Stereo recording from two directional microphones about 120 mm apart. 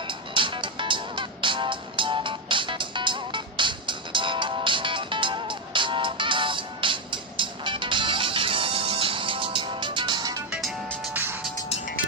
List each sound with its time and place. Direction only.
0.1 s music: 45° right (ahead or behind)
10.5 s music: centre (ahead or behind)
11.1 s music: 20° right (ahead or behind)